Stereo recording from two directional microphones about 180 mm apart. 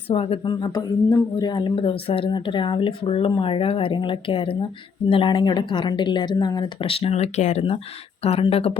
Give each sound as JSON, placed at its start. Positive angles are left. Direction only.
{"t": 0.1, "sound": "speech", "side_deg": 30}